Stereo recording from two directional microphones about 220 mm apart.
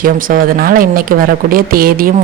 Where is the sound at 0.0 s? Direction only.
40° right (ahead or behind).